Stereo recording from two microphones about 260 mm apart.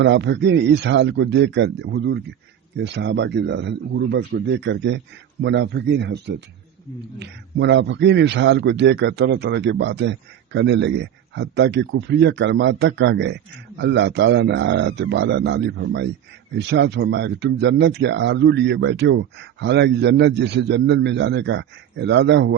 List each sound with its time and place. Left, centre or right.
0.0 s a man's voice: right